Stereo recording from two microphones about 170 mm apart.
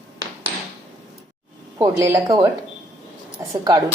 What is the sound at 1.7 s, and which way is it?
Speech, 20° right (ahead or behind).